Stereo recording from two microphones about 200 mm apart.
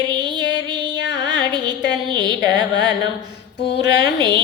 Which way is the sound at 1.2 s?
20° right (ahead or behind).